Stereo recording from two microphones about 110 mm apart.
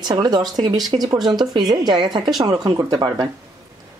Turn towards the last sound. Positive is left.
turn(degrees=-35)  # may be behind; listen again after turning